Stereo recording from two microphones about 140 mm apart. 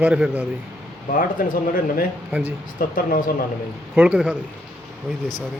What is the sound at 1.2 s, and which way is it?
Speech, 90° left.